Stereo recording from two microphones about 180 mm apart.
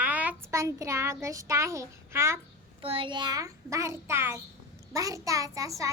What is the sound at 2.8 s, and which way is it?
A child's voice, 30° right (ahead or behind).